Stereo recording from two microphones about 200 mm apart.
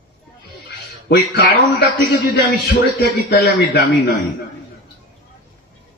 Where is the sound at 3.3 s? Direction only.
55° left (ahead or behind).